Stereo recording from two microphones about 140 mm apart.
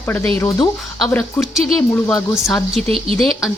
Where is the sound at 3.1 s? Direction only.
Centre (ahead or behind).